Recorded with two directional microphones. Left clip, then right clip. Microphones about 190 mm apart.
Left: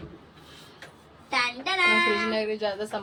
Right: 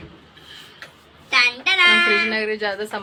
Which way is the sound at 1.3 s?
35° left (ahead or behind).